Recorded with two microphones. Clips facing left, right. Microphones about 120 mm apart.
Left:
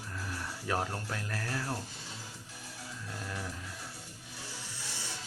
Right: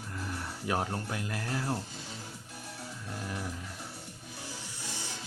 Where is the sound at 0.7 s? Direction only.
15° right (ahead or behind).